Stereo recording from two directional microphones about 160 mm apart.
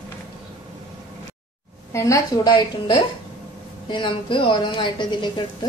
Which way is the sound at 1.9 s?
20° left (ahead or behind).